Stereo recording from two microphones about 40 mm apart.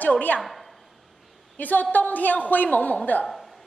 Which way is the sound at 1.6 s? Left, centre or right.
Left.